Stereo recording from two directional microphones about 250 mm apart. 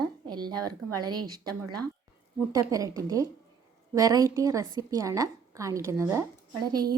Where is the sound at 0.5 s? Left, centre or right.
Right.